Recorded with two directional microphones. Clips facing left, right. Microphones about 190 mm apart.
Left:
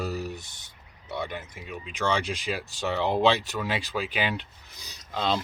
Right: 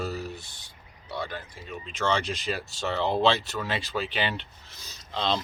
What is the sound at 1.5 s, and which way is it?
Speech, 10° left (ahead or behind).